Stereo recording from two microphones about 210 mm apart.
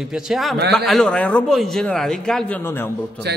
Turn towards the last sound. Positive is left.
turn(degrees=10)  # may be behind; listen again after turning